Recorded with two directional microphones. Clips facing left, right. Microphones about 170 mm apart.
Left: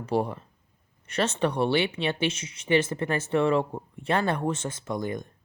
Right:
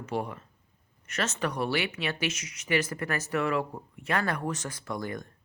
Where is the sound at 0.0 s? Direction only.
35° left (ahead or behind).